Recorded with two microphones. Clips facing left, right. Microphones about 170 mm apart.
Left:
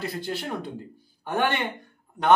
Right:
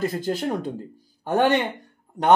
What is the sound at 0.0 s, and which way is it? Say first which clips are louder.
Speech: right 6 dB; 45° right (ahead or behind).